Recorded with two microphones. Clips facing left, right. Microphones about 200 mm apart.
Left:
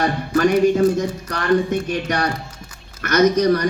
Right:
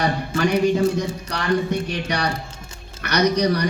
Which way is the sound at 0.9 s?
50° left (ahead or behind).